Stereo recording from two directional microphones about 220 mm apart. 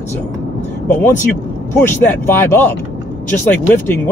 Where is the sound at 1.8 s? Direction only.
10° left (ahead or behind).